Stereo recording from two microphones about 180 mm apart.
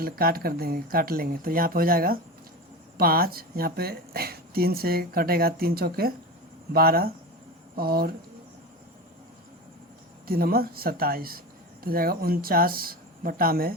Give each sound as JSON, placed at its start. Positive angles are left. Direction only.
{"t": 0.0, "sound": "speech", "side_deg": -55}
{"t": 10.2, "sound": "speech", "side_deg": -55}